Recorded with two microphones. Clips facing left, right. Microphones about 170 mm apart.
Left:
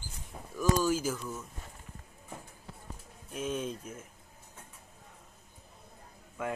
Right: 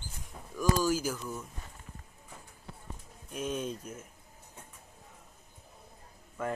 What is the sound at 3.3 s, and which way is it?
Speech, centre (ahead or behind).